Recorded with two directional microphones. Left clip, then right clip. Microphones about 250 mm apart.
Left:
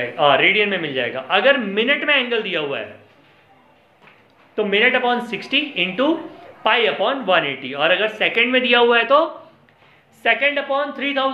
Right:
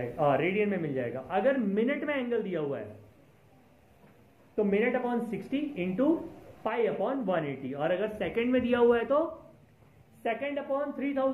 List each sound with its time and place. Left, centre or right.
0.2 s a man's voice: centre
4.6 s a man's voice: centre
10.2 s speech: centre